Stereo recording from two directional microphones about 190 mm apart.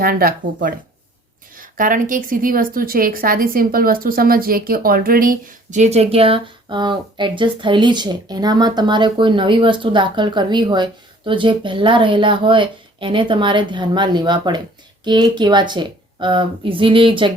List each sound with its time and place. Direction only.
0.0 s speech: 50° right (ahead or behind); by 17.3 s 25° right (ahead or behind)